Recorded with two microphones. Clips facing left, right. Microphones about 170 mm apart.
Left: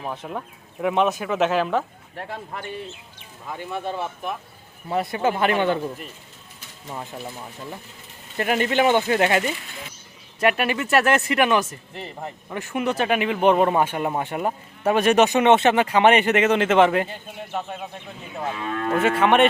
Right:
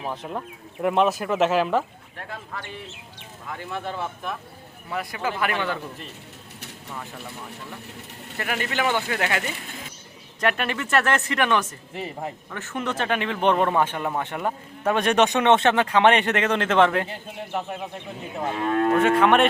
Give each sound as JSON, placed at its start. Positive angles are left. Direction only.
{"t": 0.0, "sound": "speech", "side_deg": 0}
{"t": 2.1, "sound": "speech", "side_deg": 25}
{"t": 8.4, "sound": "speech", "side_deg": 25}
{"t": 10.4, "sound": "speech", "side_deg": 10}
{"t": 11.9, "sound": "speech", "side_deg": -5}
{"t": 12.5, "sound": "speech", "side_deg": 10}
{"t": 18.9, "sound": "speech", "side_deg": 5}